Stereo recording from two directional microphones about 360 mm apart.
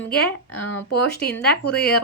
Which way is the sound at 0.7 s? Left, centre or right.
Left.